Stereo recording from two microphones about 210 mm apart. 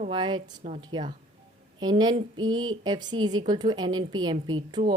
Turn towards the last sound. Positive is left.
turn(degrees=-20)  # may be behind; listen again after turning